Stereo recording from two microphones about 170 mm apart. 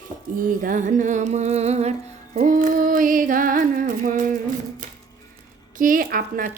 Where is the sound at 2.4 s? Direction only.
55° right (ahead or behind).